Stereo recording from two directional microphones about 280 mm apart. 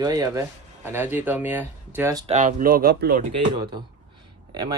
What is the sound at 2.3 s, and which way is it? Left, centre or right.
Speech, right.